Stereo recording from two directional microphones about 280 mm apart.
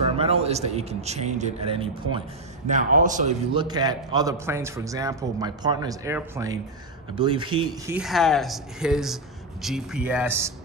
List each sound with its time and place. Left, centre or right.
0.2 s a man's voice: right
3.6 s a man's voice: centre
7.9 s speech: centre